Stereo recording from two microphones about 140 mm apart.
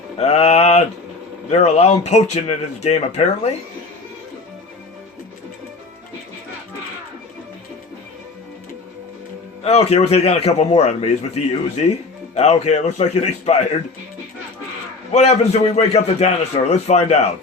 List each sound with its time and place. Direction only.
0.2 s mantra: 50° left (ahead or behind)
1.5 s a man's voice: 50° left (ahead or behind)
9.6 s a man's voice: 45° left (ahead or behind)
15.1 s a man's voice: 50° left (ahead or behind)